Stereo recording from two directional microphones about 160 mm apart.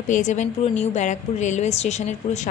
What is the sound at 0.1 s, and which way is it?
A woman's voice, 50° left (ahead or behind).